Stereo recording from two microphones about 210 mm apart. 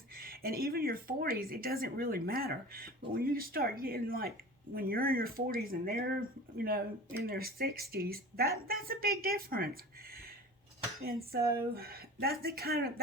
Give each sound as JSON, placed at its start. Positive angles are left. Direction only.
{"t": 0.2, "sound": "speech", "side_deg": -45}
{"t": 11.0, "sound": "speech", "side_deg": -45}